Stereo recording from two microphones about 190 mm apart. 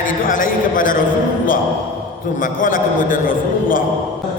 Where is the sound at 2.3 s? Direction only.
45° left (ahead or behind).